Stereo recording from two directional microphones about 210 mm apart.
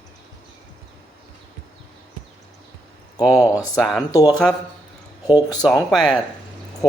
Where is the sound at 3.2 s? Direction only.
15° left (ahead or behind).